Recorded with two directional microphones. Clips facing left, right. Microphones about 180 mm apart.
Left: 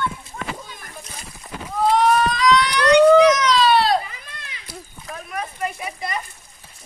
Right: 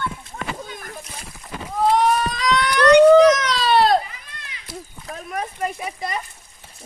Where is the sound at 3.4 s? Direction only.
50° right (ahead or behind).